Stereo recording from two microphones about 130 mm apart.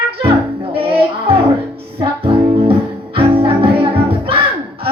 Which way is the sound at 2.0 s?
45° right (ahead or behind).